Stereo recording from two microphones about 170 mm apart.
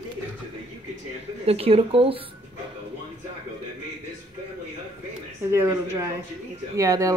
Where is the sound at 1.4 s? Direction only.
35° right (ahead or behind).